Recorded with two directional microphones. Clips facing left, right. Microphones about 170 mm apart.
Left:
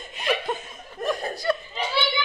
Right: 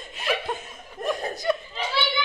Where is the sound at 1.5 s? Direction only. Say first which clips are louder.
Even; 15° right (ahead or behind).